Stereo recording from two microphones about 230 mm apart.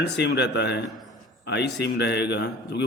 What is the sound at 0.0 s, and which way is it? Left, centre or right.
A man's voice, left.